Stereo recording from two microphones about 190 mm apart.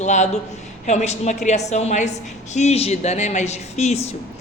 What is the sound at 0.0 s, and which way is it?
A woman's voice, 40° left (ahead or behind).